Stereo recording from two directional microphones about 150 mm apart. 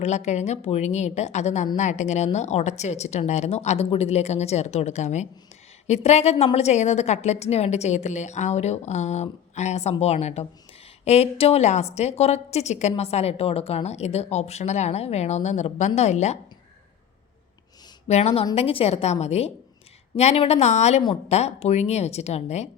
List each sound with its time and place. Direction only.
0.0 s a woman's voice: 50° left (ahead or behind)
18.1 s a woman's voice: 45° left (ahead or behind)